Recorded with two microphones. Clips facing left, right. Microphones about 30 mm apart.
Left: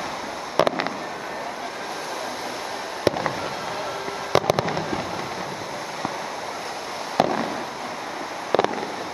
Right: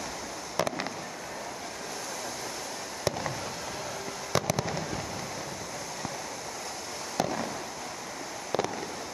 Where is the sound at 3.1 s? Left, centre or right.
Left.